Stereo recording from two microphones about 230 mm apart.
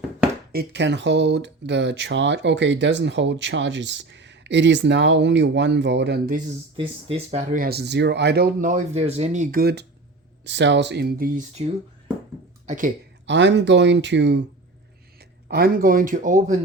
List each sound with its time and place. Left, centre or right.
0.5 s speech: right
6.7 s speech: right
12.6 s speech: right
13.2 s speech: right